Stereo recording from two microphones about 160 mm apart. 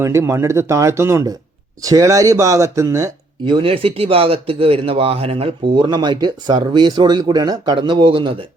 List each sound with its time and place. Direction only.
0.0 s speech: 15° right (ahead or behind); by 8.4 s 35° right (ahead or behind)